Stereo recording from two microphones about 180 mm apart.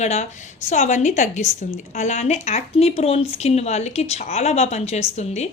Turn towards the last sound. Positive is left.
turn(degrees=40)  # may be behind; listen again after turning